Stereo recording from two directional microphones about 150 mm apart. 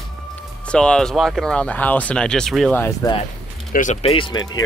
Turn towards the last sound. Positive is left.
turn(degrees=30)  # may be behind; listen again after turning